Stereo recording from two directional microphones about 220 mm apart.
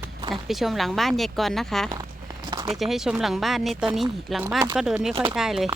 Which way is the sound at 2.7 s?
Centre (ahead or behind).